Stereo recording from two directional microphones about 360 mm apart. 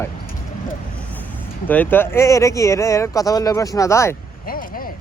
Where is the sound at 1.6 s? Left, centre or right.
Centre.